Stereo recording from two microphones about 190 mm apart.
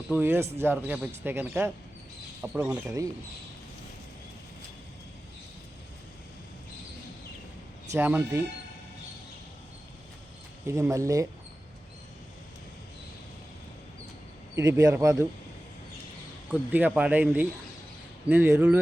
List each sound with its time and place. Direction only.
0.1 s speech: 10° right (ahead or behind)
7.9 s speech: 10° right (ahead or behind)
10.7 s speech: 15° right (ahead or behind)
14.5 s speech: 15° right (ahead or behind)
16.5 s speech: 10° right (ahead or behind)